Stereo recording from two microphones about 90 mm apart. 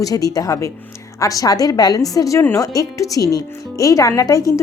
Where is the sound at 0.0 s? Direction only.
40° left (ahead or behind).